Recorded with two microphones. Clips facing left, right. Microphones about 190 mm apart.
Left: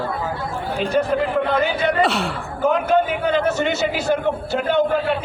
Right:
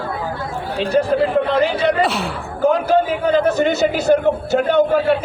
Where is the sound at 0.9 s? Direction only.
30° right (ahead or behind).